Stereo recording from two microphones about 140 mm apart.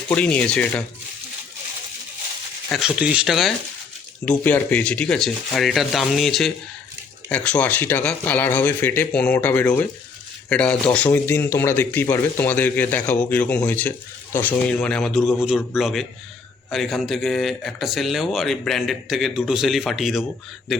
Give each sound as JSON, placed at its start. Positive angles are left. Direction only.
{"t": 0.1, "sound": "speech", "side_deg": 10}
{"t": 2.7, "sound": "speech", "side_deg": -5}
{"t": 4.3, "sound": "speech", "side_deg": 10}